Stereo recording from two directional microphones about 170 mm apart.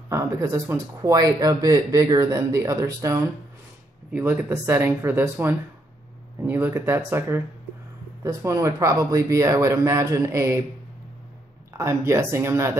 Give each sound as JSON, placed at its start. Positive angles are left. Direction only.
{"t": 0.1, "sound": "speech", "side_deg": -15}
{"t": 11.7, "sound": "speech", "side_deg": -15}